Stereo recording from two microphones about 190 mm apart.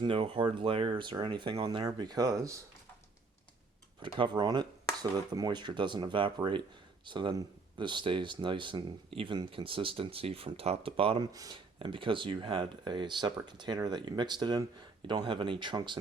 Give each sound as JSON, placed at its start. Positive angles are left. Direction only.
{"t": 0.0, "sound": "speech", "side_deg": -25}
{"t": 4.0, "sound": "speech", "side_deg": -25}